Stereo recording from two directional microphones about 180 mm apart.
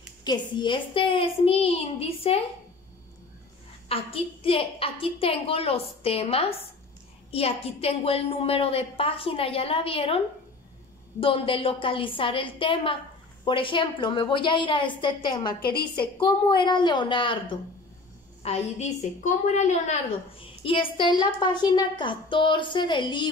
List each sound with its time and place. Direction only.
0.2 s a woman's voice: 25° left (ahead or behind)
3.9 s a woman's voice: 30° left (ahead or behind)